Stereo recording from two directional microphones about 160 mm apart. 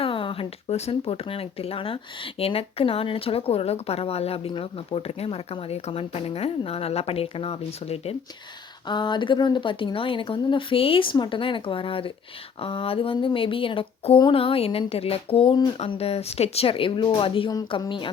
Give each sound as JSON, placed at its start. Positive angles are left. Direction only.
{"t": 0.0, "sound": "speech", "side_deg": 35}
{"t": 8.9, "sound": "speech", "side_deg": 30}
{"t": 15.8, "sound": "speech", "side_deg": 40}